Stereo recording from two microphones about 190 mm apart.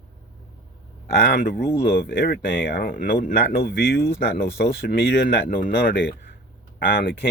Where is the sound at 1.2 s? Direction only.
50° left (ahead or behind).